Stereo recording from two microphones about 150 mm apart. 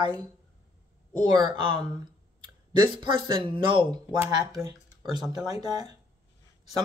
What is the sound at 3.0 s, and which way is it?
Speech, 35° right (ahead or behind).